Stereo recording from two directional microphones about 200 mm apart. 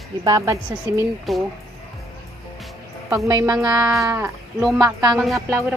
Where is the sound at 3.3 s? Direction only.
20° right (ahead or behind).